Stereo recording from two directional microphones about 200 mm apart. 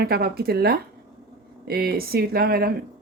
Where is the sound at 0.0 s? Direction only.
50° right (ahead or behind).